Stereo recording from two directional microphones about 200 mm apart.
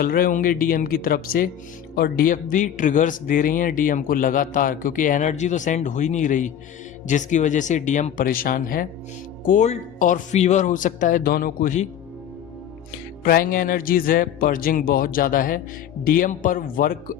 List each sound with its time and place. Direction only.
0.0 s a man's voice: 45° left (ahead or behind)
13.2 s a man's voice: 45° left (ahead or behind)